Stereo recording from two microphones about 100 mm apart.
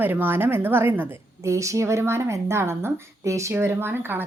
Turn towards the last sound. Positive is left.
turn(degrees=-20)  # may be behind; listen again after turning